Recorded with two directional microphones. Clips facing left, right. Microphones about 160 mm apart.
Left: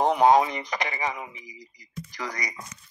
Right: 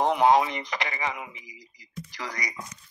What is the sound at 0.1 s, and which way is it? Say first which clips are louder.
Speech: left 2 dB; 40° left (ahead or behind).